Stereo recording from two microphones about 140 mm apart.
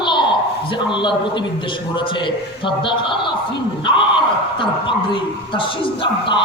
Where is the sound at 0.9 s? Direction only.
35° left (ahead or behind).